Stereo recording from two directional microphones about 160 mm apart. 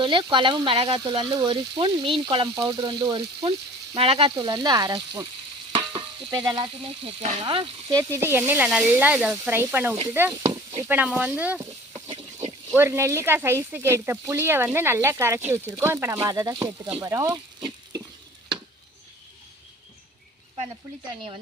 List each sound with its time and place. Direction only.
0.0 s speech: 30° right (ahead or behind)
5.7 s stir: 35° right (ahead or behind)
6.5 s speech: 35° right (ahead or behind); by 11.6 s 10° right (ahead or behind)
11.9 s a sound: 40° right (ahead or behind)
12.7 s speech: 15° right (ahead or behind)
17.0 s frying: 20° right (ahead or behind)